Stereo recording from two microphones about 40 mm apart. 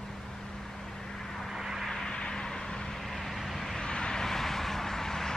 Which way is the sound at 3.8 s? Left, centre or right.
Left.